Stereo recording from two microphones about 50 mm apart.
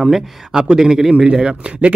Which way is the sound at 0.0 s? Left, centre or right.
Centre.